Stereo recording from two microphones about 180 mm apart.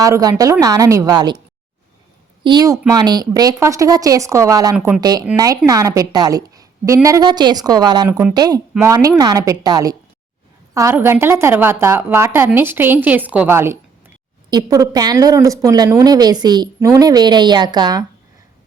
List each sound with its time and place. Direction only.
0.0 s a woman's voice: 20° right (ahead or behind)
2.4 s a woman's voice: 25° right (ahead or behind)
8.0 s a woman's voice: 10° right (ahead or behind)
8.3 s a woman's voice: 20° right (ahead or behind)